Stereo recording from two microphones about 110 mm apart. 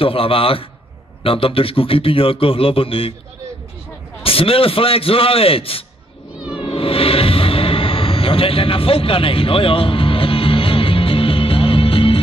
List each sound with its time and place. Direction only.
0.0 s a man's voice: 55° left (ahead or behind)
4.2 s a man's voice: 55° left (ahead or behind)
6.5 s music: 60° left (ahead or behind)